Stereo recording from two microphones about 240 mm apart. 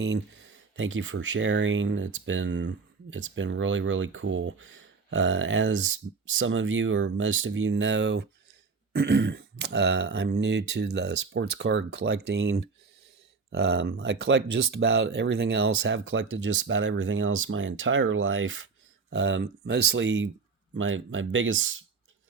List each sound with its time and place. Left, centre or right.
0.0 s speech: right